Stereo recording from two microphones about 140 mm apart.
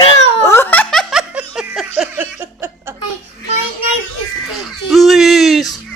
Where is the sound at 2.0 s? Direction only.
15° right (ahead or behind).